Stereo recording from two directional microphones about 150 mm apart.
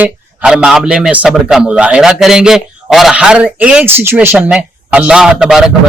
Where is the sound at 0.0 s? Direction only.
5° right (ahead or behind).